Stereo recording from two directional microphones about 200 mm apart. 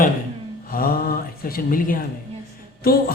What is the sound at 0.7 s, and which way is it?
A man's voice, 45° left (ahead or behind).